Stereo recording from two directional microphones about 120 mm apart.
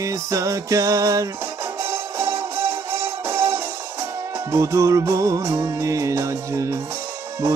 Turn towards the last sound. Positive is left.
turn(degrees=-25)  # may be behind; listen again after turning